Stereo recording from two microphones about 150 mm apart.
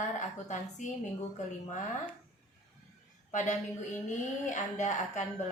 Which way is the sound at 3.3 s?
55° left (ahead or behind).